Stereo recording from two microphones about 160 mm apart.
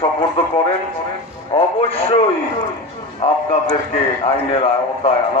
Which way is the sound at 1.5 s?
35° left (ahead or behind).